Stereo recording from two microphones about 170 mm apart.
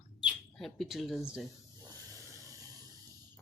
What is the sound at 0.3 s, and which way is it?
Speech, centre (ahead or behind).